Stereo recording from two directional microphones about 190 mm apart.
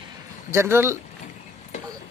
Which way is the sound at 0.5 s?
15° right (ahead or behind).